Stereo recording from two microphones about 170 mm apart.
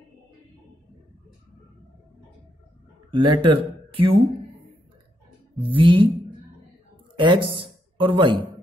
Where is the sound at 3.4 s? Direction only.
30° right (ahead or behind).